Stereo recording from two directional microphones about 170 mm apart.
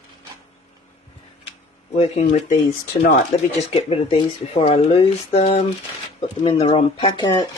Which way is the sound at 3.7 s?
35° left (ahead or behind).